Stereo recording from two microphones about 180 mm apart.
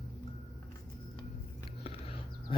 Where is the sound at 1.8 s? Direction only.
35° left (ahead or behind).